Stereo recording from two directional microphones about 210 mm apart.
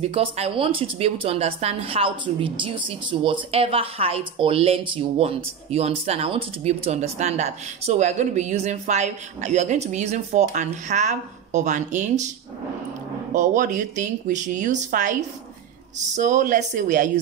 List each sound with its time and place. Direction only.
0.0 s a woman's voice: 30° right (ahead or behind)
13.3 s speech: 35° right (ahead or behind)